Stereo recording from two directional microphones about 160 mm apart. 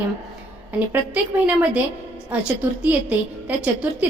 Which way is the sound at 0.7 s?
10° right (ahead or behind).